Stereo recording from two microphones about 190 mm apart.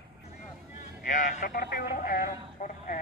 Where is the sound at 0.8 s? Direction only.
40° left (ahead or behind).